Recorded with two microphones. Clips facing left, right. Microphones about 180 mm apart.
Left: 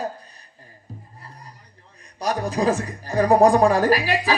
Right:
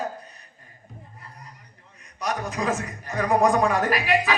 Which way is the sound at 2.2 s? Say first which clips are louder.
Left 5 dB; 35° left (ahead or behind).